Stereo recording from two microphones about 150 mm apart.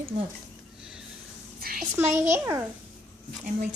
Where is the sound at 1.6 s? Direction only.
80° right.